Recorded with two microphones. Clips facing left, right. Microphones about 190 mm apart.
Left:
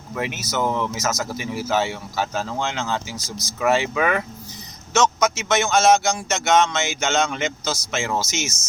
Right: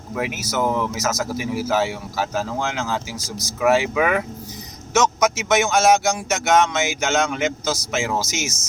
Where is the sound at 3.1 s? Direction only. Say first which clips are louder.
Right 2 dB; 35° right (ahead or behind).